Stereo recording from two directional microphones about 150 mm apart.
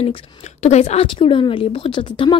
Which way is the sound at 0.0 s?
45° left (ahead or behind).